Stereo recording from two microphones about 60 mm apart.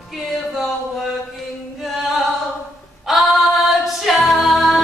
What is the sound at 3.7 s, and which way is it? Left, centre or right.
A capella, centre.